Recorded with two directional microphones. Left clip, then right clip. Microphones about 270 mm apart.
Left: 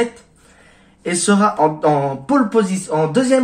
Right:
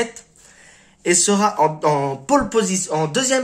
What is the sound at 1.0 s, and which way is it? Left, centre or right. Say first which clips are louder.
Speech: left 1 dB; right.